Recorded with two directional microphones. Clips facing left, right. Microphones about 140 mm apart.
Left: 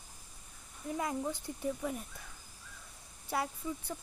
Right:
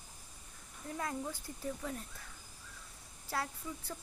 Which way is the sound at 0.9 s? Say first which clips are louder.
Left 4 dB; 15° left (ahead or behind).